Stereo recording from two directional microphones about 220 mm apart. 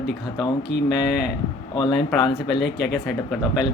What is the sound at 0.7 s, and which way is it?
Speech, 50° left (ahead or behind).